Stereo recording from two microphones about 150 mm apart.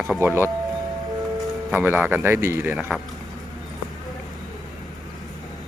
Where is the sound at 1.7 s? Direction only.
10° right (ahead or behind).